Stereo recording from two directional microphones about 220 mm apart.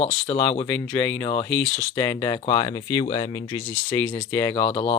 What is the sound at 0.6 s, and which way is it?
Speech, 5° left (ahead or behind).